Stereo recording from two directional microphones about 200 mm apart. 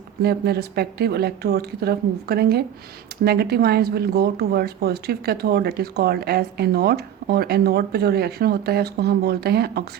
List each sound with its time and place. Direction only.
0.2 s speech: 50° right (ahead or behind)